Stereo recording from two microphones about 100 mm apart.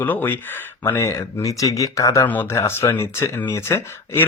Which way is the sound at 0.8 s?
30° left (ahead or behind).